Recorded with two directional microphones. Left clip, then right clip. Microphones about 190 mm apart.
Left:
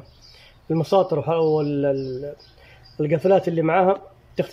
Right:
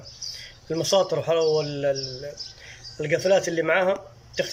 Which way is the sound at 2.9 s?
25° left (ahead or behind).